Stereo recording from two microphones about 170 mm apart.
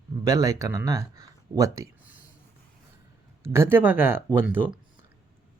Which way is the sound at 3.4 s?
15° right (ahead or behind).